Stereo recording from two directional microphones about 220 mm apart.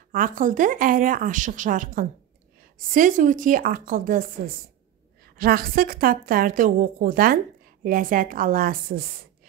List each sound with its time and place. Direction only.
0.1 s a woman's voice: 40° right (ahead or behind)